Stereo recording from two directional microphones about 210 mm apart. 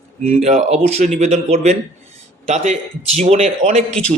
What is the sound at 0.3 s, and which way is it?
A man's voice, 35° right (ahead or behind).